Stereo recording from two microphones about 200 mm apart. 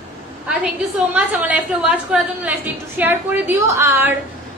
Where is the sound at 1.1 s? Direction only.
5° right (ahead or behind).